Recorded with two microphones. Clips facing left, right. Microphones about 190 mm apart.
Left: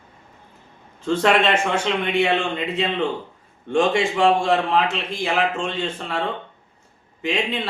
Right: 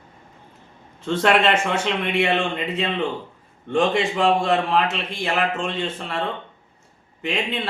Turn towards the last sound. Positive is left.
turn(degrees=0)  # may be behind; listen again after turning